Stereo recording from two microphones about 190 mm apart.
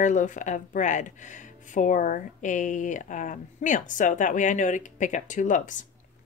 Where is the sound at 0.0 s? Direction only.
40° left (ahead or behind).